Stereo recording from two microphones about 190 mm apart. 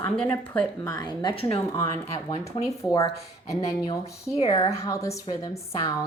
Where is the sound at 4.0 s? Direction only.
30° left (ahead or behind).